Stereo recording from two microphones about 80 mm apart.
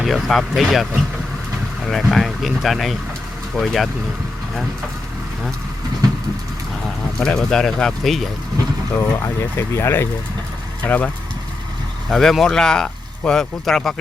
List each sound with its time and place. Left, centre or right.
0.0 s speech: centre
1.9 s speech: centre
7.2 s speech: centre
9.0 s speech: left
10.8 s speech: left
12.0 s speech: centre